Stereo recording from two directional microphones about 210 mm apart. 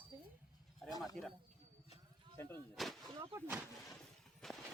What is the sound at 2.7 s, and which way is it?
Speech, centre (ahead or behind).